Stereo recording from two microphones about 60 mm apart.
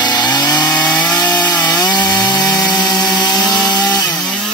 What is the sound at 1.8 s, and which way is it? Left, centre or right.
Wood, left.